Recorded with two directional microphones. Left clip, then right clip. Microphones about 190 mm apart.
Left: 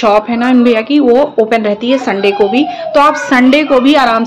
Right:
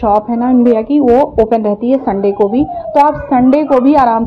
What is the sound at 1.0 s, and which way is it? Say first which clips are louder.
Speech: even; 25° left (ahead or behind).